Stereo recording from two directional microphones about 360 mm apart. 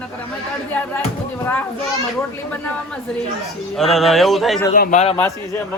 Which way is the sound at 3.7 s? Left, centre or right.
Centre.